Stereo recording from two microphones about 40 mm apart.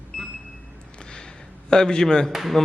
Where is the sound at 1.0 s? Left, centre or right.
Centre.